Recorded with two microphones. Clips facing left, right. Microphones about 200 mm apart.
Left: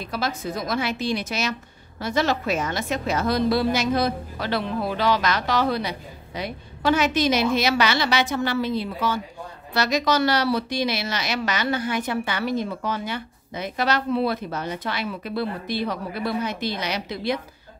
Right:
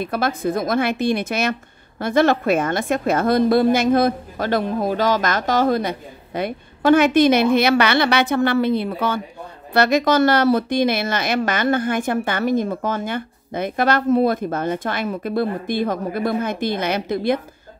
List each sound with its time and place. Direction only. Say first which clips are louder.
0.0 s speech: right 6 dB; 55° right (ahead or behind)